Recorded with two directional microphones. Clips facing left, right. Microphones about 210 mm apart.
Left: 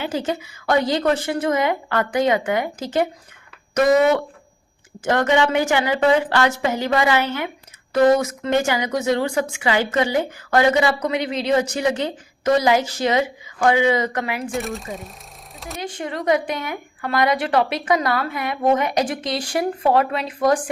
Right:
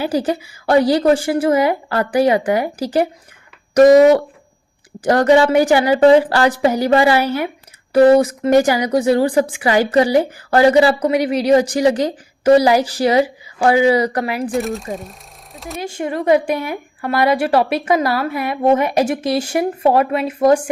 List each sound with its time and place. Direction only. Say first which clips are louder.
0.0 s a woman's voice: right 5 dB; 35° right (ahead or behind)
14.5 s speech: right 6 dB; centre (ahead or behind)
15.5 s a sound: right 5 dB; centre (ahead or behind)
15.8 s a woman's voice: right 5 dB; 25° right (ahead or behind)